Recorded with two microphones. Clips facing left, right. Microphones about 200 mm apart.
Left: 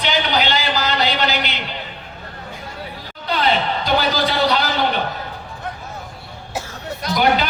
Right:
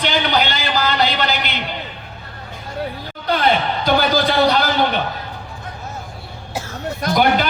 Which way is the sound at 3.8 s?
50° right (ahead or behind).